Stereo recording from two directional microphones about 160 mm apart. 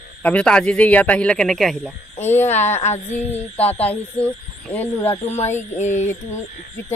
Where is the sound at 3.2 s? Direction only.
10° left (ahead or behind).